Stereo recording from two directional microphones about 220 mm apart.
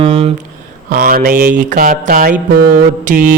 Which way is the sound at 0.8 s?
40° right (ahead or behind).